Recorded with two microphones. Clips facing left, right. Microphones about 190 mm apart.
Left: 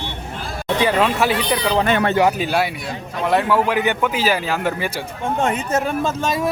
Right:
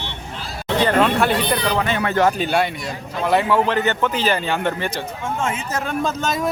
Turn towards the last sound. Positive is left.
turn(degrees=10)  # may be behind; listen again after turning